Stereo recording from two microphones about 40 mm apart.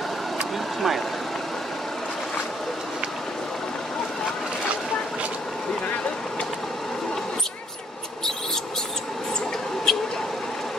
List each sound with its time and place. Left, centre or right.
0.7 s speech: centre
9.9 s vehicle: centre